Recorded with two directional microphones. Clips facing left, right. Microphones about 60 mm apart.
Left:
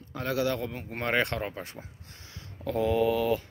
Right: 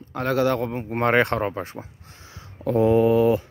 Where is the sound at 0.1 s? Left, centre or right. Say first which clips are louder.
Right 7 dB; right; by 2.8 s centre.